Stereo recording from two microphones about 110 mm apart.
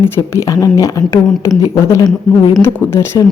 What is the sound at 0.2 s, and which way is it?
Speech, 30° left (ahead or behind).